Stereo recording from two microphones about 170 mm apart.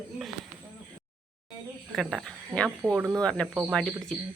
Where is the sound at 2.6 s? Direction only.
15° right (ahead or behind).